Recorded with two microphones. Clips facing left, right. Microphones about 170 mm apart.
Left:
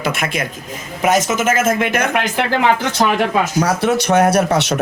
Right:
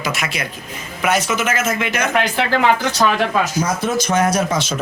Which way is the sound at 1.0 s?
40° left (ahead or behind).